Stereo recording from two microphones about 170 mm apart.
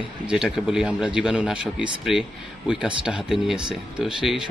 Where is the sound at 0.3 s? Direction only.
5° right (ahead or behind).